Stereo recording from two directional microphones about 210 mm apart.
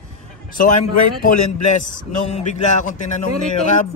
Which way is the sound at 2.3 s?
35° left (ahead or behind).